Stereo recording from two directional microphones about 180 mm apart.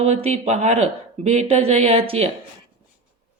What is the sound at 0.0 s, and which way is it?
Speech, 35° right (ahead or behind).